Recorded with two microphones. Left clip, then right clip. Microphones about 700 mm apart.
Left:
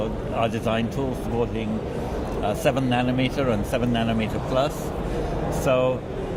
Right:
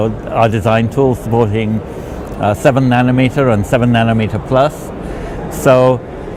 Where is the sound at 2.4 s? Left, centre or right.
Right.